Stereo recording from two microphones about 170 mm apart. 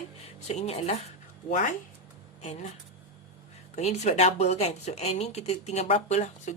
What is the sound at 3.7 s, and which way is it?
A woman's voice, 40° left (ahead or behind).